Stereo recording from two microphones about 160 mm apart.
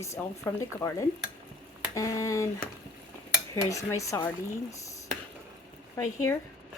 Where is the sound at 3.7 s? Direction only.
20° left (ahead or behind).